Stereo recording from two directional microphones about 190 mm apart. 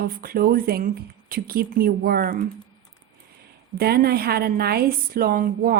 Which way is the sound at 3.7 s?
55° right (ahead or behind).